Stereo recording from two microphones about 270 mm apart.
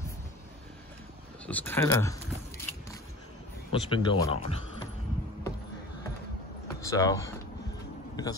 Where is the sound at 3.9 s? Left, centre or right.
Centre.